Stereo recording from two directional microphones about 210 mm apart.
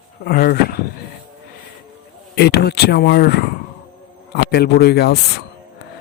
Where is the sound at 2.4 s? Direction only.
50° left (ahead or behind).